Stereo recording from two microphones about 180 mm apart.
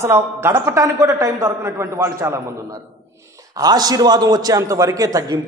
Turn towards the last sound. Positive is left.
turn(degrees=-20)  # may be behind; listen again after turning